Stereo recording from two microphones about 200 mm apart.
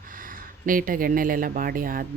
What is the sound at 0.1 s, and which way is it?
Speech, 45° right (ahead or behind).